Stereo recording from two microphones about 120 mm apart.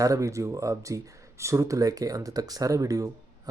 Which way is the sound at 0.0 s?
25° right (ahead or behind).